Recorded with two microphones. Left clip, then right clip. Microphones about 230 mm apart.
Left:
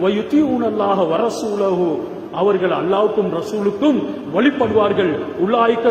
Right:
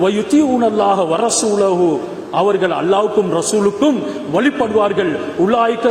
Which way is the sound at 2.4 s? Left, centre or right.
Right.